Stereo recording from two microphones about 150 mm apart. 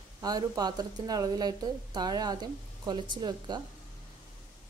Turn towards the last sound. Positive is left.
turn(degrees=-30)  # may be behind; listen again after turning